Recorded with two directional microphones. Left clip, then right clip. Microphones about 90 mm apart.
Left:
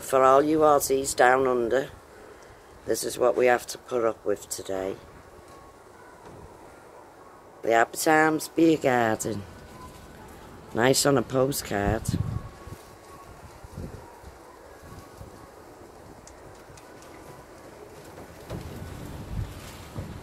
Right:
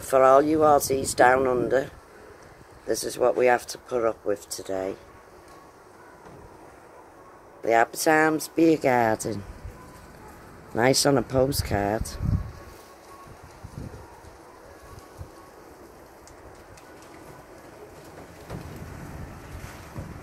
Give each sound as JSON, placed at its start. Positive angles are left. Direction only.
{"t": 0.0, "sound": "speech", "side_deg": -25}
{"t": 2.9, "sound": "speech", "side_deg": -15}
{"t": 7.6, "sound": "speech", "side_deg": -20}
{"t": 10.7, "sound": "speech", "side_deg": -25}